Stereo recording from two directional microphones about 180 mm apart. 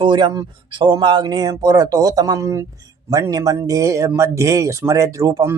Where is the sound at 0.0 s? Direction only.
25° right (ahead or behind).